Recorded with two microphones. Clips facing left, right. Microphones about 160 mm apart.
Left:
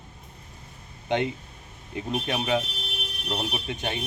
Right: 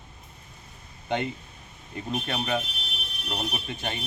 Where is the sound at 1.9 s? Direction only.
5° left (ahead or behind).